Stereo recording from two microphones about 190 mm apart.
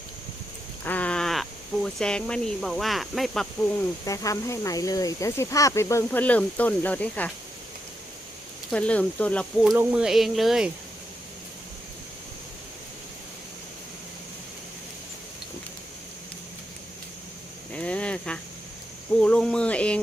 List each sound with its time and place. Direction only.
0.9 s speech: 5° left (ahead or behind)
4.0 s speech: 15° left (ahead or behind)
8.7 s speech: 5° left (ahead or behind)
9.7 s a sound: 5° right (ahead or behind)
17.7 s a sound: 5° left (ahead or behind)
19.1 s cricket: 5° left (ahead or behind)